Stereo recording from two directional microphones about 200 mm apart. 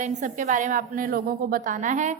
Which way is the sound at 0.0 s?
40° right (ahead or behind).